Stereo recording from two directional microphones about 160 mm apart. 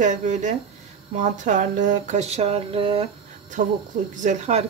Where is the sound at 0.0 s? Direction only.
50° right (ahead or behind); by 3.1 s 35° right (ahead or behind).